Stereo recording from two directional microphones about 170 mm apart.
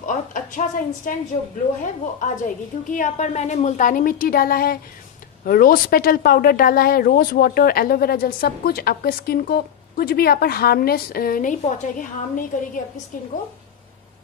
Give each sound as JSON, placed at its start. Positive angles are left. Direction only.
{"t": 0.0, "sound": "a woman's voice", "side_deg": 50}
{"t": 2.1, "sound": "a woman's voice", "side_deg": 50}